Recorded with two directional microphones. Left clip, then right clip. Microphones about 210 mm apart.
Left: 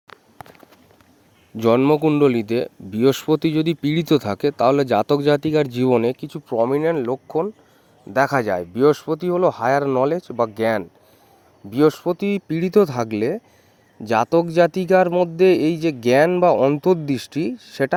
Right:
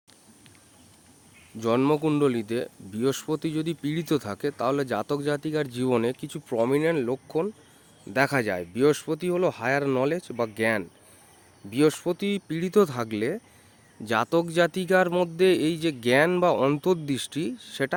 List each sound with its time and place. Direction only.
1.5 s a man's voice: 35° left (ahead or behind); by 7.5 s 15° left (ahead or behind)
8.1 s a man's voice: centre (ahead or behind)
8.7 s a man's voice: 20° left (ahead or behind)
11.7 s a man's voice: 20° left (ahead or behind)